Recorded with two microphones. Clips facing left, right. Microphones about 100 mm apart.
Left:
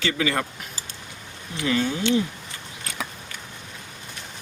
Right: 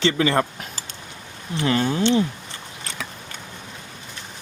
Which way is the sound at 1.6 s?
40° right (ahead or behind).